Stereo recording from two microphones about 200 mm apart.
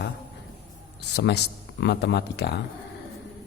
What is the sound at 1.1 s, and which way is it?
Speech, 55° left (ahead or behind).